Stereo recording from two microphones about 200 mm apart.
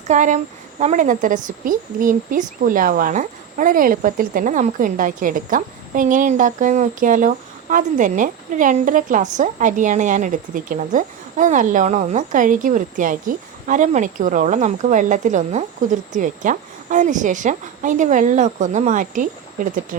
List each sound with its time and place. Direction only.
0.1 s a woman's voice: 40° right (ahead or behind)